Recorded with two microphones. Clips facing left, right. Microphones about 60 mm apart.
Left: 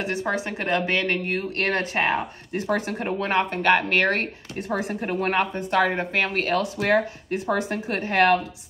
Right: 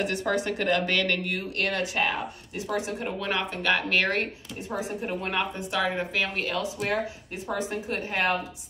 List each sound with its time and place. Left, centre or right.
0.0 s speech: left
2.6 s speech: left
4.6 s speech: left